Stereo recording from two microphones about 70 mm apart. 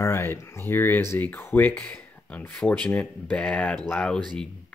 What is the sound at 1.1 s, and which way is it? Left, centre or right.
Speech, left.